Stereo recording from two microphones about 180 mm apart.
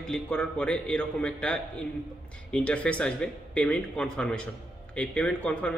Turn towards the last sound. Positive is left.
turn(degrees=5)  # may be behind; listen again after turning